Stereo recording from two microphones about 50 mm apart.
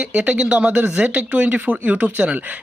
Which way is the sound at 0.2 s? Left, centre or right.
Right.